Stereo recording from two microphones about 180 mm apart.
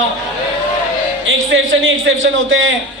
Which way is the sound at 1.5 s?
90° right.